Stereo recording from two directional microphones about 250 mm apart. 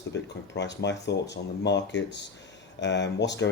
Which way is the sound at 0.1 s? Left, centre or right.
Left.